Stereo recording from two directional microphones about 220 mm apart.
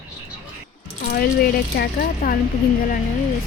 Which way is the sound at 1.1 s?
45° left (ahead or behind).